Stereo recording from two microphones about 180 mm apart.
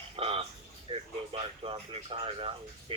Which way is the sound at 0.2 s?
30° right (ahead or behind).